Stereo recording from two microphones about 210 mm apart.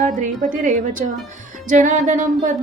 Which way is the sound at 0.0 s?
40° right (ahead or behind).